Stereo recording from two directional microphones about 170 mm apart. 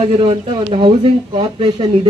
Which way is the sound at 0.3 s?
35° right (ahead or behind).